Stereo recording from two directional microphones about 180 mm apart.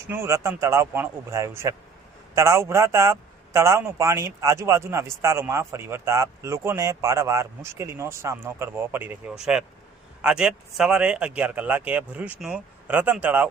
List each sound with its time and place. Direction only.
0.1 s a man's voice: 15° right (ahead or behind)